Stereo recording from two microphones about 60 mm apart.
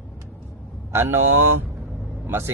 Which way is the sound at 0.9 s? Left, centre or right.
Right.